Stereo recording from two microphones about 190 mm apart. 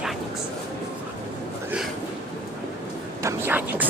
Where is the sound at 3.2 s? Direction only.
15° right (ahead or behind).